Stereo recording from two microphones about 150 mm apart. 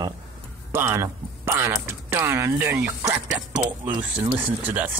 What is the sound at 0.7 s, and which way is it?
Speech, 15° right (ahead or behind).